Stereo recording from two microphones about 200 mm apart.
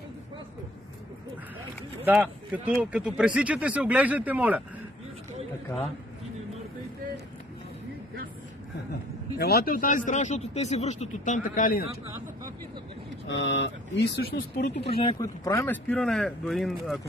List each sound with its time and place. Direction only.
2.0 s speech: 5° right (ahead or behind)
9.4 s speech: 50° left (ahead or behind)
13.3 s speech: 60° left (ahead or behind)
14.9 s speech: 25° left (ahead or behind)
15.2 s speech: 15° left (ahead or behind)